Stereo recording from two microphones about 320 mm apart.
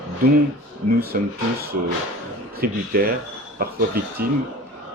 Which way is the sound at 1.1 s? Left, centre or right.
Right.